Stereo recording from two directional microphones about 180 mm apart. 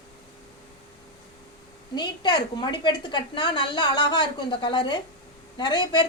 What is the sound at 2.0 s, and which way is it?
A woman's voice, 25° left (ahead or behind).